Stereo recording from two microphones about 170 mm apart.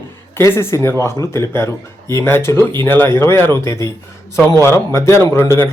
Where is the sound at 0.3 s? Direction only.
15° left (ahead or behind).